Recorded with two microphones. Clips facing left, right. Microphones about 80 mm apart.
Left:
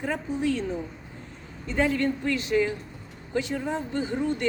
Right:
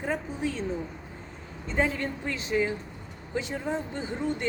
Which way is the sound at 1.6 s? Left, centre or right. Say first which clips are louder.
Left 4 dB; right.